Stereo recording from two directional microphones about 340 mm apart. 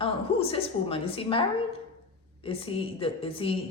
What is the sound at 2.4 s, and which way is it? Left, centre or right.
Speech, centre.